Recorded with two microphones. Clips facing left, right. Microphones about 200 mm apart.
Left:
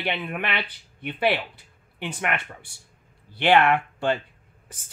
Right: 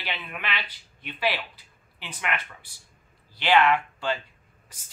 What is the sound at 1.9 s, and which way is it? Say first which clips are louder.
Speech: left 4 dB; 45° left (ahead or behind).